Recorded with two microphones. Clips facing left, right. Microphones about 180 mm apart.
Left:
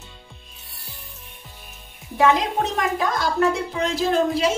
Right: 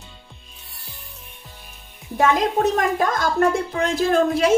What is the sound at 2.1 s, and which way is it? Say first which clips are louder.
A woman's voice: right 1 dB; 45° right (ahead or behind).